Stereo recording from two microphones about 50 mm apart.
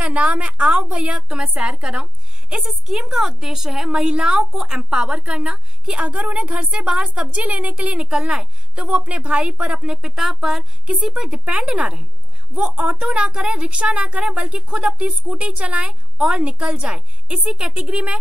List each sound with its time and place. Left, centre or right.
0.0 s a woman's voice: right
2.6 s a woman's voice: centre; by 6.6 s right
6.6 s a woman's voice: centre
16.2 s a woman's voice: centre